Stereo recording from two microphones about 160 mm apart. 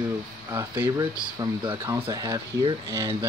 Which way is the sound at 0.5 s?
15° right (ahead or behind).